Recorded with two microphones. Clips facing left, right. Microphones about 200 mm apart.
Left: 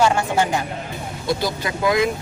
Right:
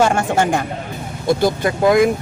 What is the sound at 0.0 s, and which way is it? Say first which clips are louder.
Speech: right 3 dB; 50° right (ahead or behind).